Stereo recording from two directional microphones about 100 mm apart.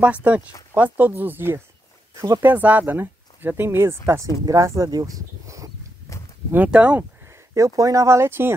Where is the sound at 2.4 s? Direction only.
15° right (ahead or behind); by 5.7 s 35° right (ahead or behind).